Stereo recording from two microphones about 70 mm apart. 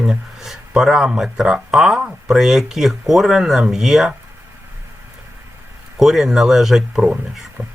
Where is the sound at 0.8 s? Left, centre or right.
Centre.